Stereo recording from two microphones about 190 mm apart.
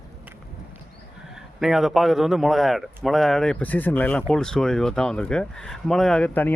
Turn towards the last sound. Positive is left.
turn(degrees=10)  # may be behind; listen again after turning